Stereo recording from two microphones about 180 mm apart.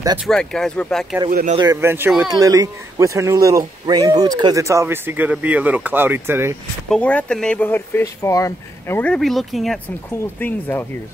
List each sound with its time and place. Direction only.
0.3 s speech: 5° left (ahead or behind)
1.3 s speech: 45° right (ahead or behind)
1.6 s speech: 15° right (ahead or behind)
6.9 s speech: 5° left (ahead or behind)
10.2 s speech: 10° left (ahead or behind)